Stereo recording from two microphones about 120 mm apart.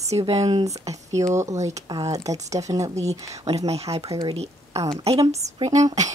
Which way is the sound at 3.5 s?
60° right (ahead or behind).